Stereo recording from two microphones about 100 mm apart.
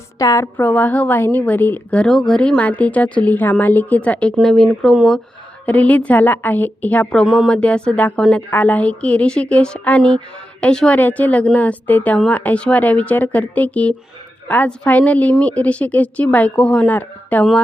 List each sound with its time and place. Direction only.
0.2 s a woman's voice: 35° left (ahead or behind)
0.5 s a woman's voice: 15° left (ahead or behind)
2.0 s a woman's voice: 5° left (ahead or behind)
5.6 s a woman's voice: 15° left (ahead or behind)
7.3 s speech: centre (ahead or behind)
7.5 s a woman's voice: 10° left (ahead or behind)